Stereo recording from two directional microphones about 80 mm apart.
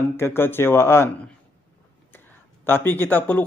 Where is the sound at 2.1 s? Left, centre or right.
Left.